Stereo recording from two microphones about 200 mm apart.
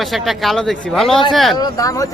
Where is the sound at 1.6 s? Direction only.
20° left (ahead or behind).